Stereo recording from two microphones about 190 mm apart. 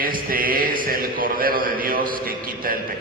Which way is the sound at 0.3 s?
50° right (ahead or behind).